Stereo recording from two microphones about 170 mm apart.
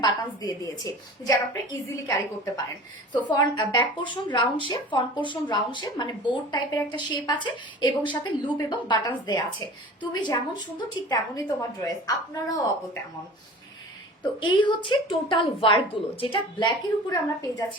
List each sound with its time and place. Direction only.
0.0 s speech: 20° left (ahead or behind)
14.4 s speech: 30° left (ahead or behind)